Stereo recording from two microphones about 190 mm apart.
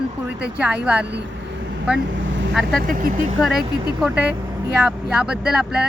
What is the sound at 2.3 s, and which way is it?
Vehicle, 75° right (ahead or behind).